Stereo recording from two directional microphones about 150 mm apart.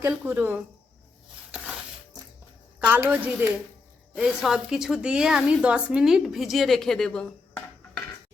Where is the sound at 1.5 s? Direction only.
10° right (ahead or behind).